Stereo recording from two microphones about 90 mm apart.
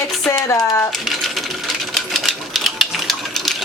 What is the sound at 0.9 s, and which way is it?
Typewriter, centre (ahead or behind).